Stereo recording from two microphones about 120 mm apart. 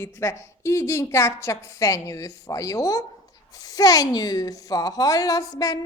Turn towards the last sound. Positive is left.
turn(degrees=30)  # may be behind; listen again after turning